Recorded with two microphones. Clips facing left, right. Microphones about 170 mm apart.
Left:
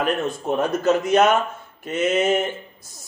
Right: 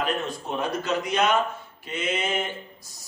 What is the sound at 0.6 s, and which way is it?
A man's voice, 50° left (ahead or behind).